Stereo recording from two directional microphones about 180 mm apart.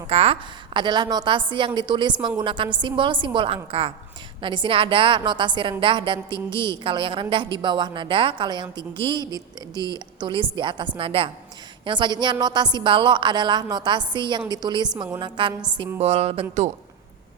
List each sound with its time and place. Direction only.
0.1 s a woman's voice: 35° right (ahead or behind)